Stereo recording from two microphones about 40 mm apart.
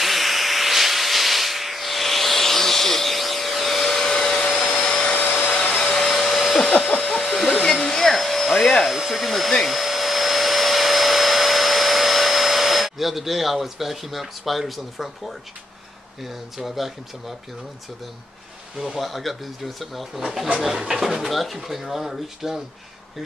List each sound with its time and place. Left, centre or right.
0.0 s a sound: centre
4.7 s vacuum cleaner: left
5.1 s vacuum cleaner: left
5.5 s vacuum cleaner: left
5.9 s vacuum cleaner: centre
6.9 s a sound: left
7.2 s hair dryer: centre
7.9 s vacuum cleaner: centre
8.9 s hair dryer: centre
9.5 s vacuum cleaner: centre
16.2 s speech: centre
18.9 s speech: centre